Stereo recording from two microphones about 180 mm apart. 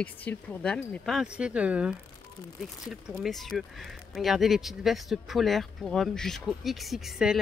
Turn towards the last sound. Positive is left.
turn(degrees=-5)  # may be behind; listen again after turning